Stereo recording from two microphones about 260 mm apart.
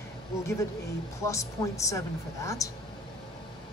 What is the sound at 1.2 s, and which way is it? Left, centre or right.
Speech, centre.